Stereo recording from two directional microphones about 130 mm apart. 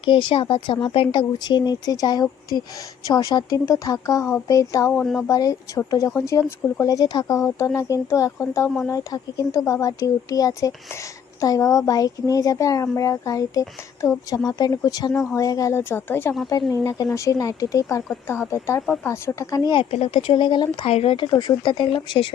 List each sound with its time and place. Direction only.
0.0 s speech: 40° left (ahead or behind)
4.9 s speech: 5° left (ahead or behind)
5.3 s speech: 25° left (ahead or behind)
19.7 s speech: 50° left (ahead or behind)